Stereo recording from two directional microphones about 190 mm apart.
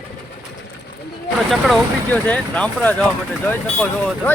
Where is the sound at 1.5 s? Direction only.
Centre (ahead or behind).